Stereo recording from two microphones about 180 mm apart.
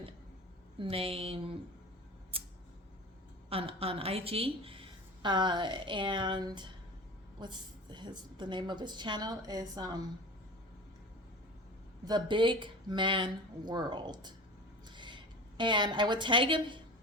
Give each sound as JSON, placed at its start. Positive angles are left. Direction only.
{"t": 0.8, "sound": "a woman's voice", "side_deg": -30}
{"t": 2.3, "sound": "scissors", "side_deg": -30}
{"t": 3.5, "sound": "a woman's voice", "side_deg": -30}
{"t": 12.0, "sound": "a woman's voice", "side_deg": -25}